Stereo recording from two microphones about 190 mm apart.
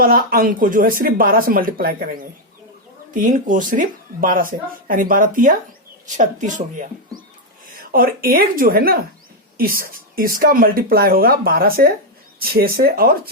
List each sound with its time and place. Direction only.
0.0 s speech: 50° right (ahead or behind)
3.2 s speech: 45° right (ahead or behind)
7.9 s speech: 50° right (ahead or behind)